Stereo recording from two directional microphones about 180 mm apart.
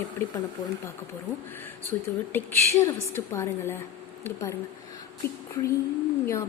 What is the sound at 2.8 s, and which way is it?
A woman's voice, 15° left (ahead or behind).